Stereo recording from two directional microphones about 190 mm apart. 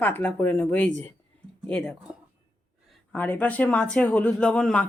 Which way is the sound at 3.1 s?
10° left (ahead or behind).